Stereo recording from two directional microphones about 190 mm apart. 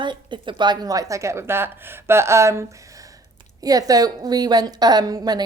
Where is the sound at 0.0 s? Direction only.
25° right (ahead or behind).